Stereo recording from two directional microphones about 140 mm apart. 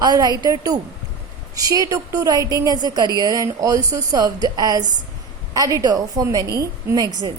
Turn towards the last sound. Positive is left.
turn(degrees=-25)  # may be behind; listen again after turning